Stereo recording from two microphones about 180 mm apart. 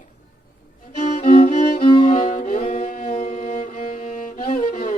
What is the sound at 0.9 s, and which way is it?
Music, 40° left (ahead or behind).